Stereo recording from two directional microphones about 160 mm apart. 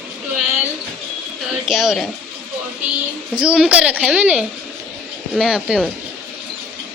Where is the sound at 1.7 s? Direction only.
5° right (ahead or behind).